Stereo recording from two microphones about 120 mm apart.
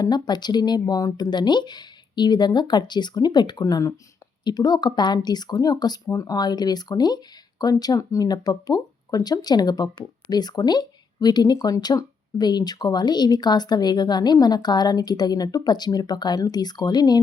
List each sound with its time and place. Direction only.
0.0 s speech: 35° left (ahead or behind)